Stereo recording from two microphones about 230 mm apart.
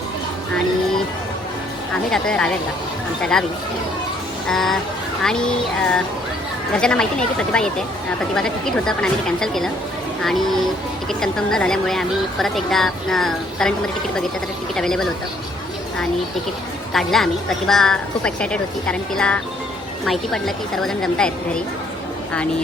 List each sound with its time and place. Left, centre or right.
2.0 s speech: centre
4.4 s speech: centre
11.1 s speech: centre
16.9 s speech: centre